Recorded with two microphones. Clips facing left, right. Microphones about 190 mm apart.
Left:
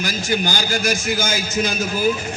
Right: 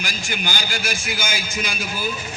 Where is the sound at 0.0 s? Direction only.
40° left (ahead or behind).